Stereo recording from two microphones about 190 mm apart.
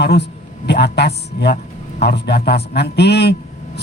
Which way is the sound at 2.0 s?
60° left (ahead or behind).